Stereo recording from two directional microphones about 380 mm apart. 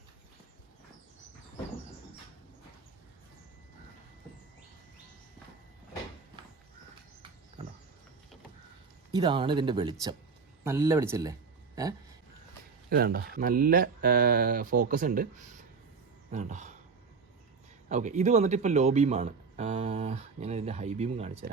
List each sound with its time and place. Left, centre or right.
9.1 s speech: centre
12.9 s speech: right
17.8 s speech: centre